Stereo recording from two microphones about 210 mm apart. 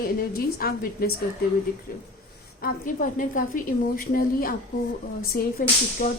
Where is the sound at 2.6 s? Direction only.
40° left (ahead or behind).